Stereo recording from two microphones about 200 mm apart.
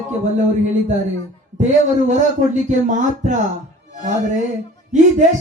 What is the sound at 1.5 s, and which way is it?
Speech, 35° right (ahead or behind).